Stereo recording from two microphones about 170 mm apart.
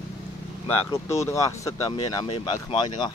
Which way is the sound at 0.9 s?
15° left (ahead or behind).